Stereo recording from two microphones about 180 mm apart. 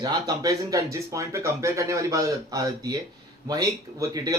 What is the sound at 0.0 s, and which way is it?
Speech, 20° right (ahead or behind).